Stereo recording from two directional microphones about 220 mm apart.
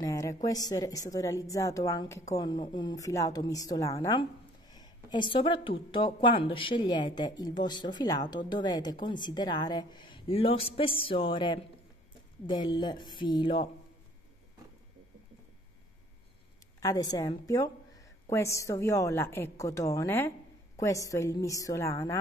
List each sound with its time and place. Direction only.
0.0 s speech: 15° left (ahead or behind)
16.8 s a woman's voice: 15° left (ahead or behind)